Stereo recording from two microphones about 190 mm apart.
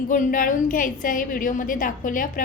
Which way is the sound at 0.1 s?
45° left (ahead or behind).